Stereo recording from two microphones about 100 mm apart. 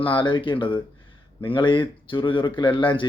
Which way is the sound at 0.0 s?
55° left (ahead or behind).